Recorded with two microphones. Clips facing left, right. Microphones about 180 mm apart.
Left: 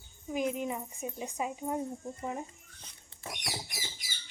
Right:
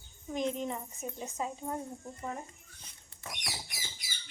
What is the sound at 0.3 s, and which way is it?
Speech, 10° left (ahead or behind).